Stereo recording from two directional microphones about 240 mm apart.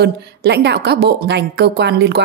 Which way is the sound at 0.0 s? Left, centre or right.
Right.